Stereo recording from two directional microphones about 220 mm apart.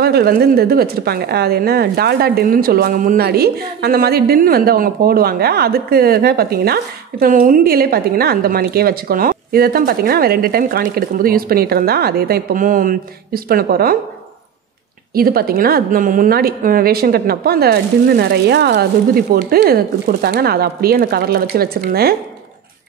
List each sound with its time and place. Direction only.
0.0 s a woman's voice: 45° right (ahead or behind)
15.1 s a woman's voice: 40° right (ahead or behind)